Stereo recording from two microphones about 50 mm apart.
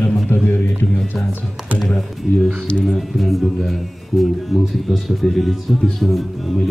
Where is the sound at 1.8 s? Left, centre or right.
Centre.